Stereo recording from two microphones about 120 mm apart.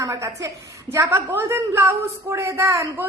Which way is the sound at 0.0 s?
25° right (ahead or behind).